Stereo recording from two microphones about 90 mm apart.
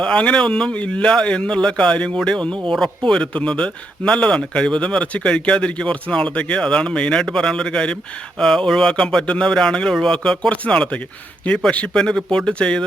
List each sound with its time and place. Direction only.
0.0 s speech: 10° left (ahead or behind)